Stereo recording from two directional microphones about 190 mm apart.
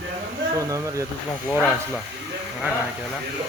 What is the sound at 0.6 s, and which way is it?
Speech, 15° right (ahead or behind).